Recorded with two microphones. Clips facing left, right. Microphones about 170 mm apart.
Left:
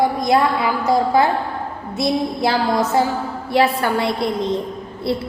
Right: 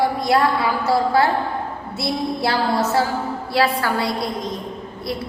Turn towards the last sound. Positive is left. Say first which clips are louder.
# left 5 dB
turn(degrees=30)  # may be behind; listen again after turning